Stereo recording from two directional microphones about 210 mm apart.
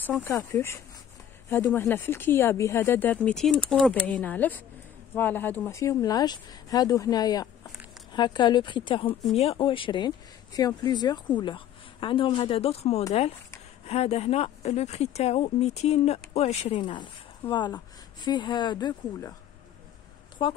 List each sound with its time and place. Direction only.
0.0 s speech: 10° left (ahead or behind)
20.4 s speech: 25° left (ahead or behind)